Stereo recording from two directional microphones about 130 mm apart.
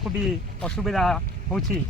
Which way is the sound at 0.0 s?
Centre (ahead or behind).